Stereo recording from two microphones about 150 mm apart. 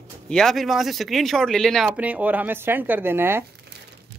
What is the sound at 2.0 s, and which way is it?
Speech, 10° right (ahead or behind).